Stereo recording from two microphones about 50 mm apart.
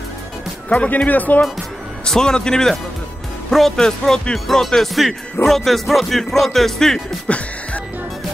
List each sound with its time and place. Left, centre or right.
0.7 s speech: left
2.0 s a man's voice: centre
7.2 s music: left